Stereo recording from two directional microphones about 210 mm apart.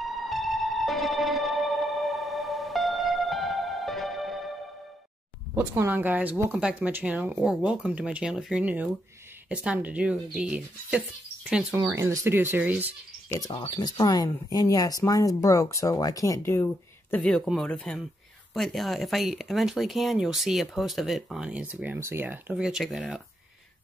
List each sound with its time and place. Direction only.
0.0 s music: centre (ahead or behind)
5.5 s speech: 10° right (ahead or behind)
11.8 s speech: 15° right (ahead or behind)
13.3 s speech: 20° left (ahead or behind); by 23.2 s centre (ahead or behind)